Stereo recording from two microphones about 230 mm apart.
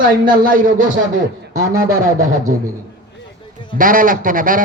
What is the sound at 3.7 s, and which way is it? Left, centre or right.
Speech, right.